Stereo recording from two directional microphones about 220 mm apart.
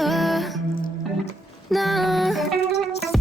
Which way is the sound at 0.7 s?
40° left (ahead or behind).